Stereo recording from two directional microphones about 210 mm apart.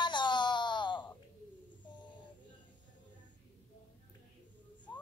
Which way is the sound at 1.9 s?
20° left (ahead or behind).